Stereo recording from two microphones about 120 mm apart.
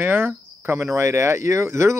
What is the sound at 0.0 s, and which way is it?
Cricket, 15° right (ahead or behind).